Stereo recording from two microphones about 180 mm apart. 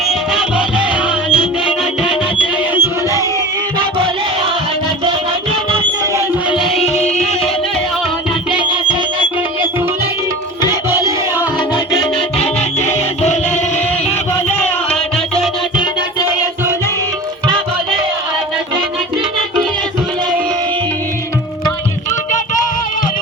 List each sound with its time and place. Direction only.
0.1 s music: 5° right (ahead or behind)
2.7 s music: 15° right (ahead or behind)
6.6 s music: centre (ahead or behind)
10.7 s music: 15° right (ahead or behind)